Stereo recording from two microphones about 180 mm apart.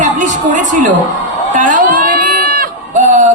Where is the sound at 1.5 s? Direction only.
45° right (ahead or behind).